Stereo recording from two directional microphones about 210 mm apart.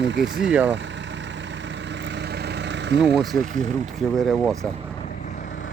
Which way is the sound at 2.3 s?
55° right (ahead or behind).